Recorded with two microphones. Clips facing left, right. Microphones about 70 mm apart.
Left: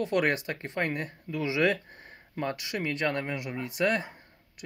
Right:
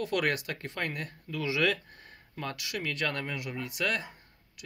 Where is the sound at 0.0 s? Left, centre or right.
Left.